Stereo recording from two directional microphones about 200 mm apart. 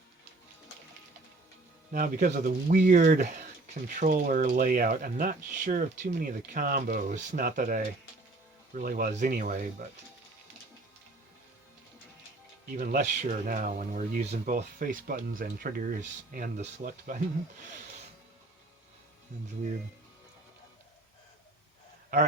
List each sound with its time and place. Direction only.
1.9 s speech: 45° right (ahead or behind)
12.7 s speech: 40° right (ahead or behind)
19.3 s speech: 40° right (ahead or behind)